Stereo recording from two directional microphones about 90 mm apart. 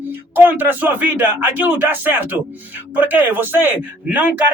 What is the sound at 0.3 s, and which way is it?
Speech, 20° right (ahead or behind).